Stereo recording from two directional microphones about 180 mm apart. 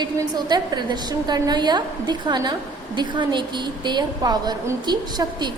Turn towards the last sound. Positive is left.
turn(degrees=-25)  # may be behind; listen again after turning